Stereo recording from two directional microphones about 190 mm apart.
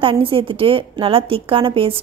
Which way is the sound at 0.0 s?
25° right (ahead or behind).